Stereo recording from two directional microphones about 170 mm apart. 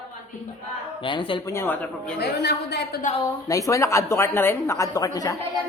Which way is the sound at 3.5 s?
20° left (ahead or behind).